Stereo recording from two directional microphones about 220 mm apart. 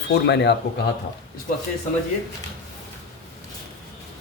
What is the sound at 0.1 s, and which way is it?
Speech, 50° left (ahead or behind).